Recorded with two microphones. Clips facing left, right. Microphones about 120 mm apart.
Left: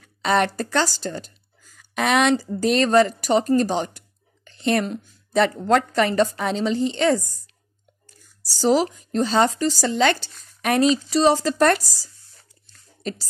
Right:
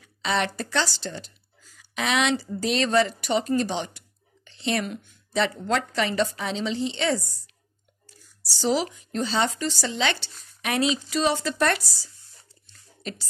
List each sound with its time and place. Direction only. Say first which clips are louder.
0.0 s a woman's voice: left 6 dB; 50° left (ahead or behind)
4.5 s a sound: left 6 dB; 50° left (ahead or behind)
4.8 s speech: left 5 dB; 35° left (ahead or behind)
5.3 s a woman's voice: left 6 dB; 50° left (ahead or behind)
8.5 s speech: left 6 dB; 40° left (ahead or behind)
12.6 s a sound: left 6 dB; 40° left (ahead or behind)